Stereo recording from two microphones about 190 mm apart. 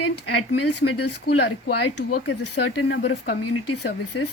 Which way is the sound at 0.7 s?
65° left (ahead or behind).